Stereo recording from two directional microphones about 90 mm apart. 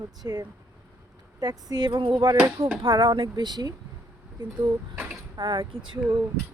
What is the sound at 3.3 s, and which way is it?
Speech, 50° right (ahead or behind).